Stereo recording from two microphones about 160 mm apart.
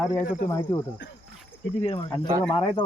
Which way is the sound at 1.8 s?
35° left (ahead or behind).